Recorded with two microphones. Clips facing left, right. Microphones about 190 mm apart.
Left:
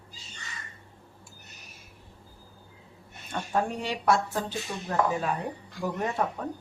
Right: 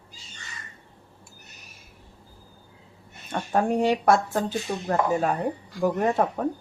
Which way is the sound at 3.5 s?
50° right (ahead or behind).